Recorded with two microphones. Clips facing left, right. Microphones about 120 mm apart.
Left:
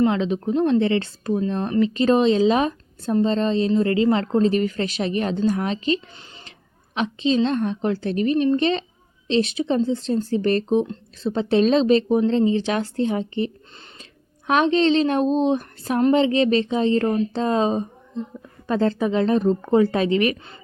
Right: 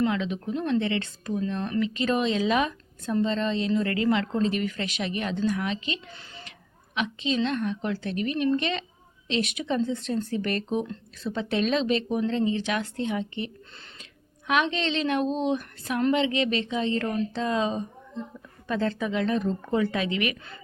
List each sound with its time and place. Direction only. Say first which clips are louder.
0.0 s speech: left 6 dB; 30° left (ahead or behind)